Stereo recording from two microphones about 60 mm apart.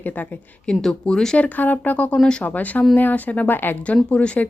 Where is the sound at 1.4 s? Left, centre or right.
Left.